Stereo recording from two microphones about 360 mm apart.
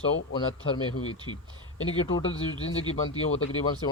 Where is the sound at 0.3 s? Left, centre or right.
Left.